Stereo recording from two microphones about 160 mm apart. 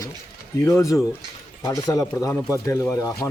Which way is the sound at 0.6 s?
20° left (ahead or behind).